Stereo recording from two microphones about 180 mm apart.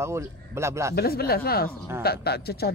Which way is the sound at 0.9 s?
60° left (ahead or behind).